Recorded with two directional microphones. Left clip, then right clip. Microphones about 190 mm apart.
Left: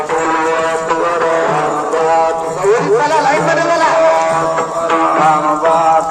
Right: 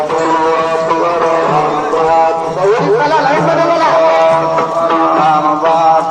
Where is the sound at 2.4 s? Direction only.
30° left (ahead or behind).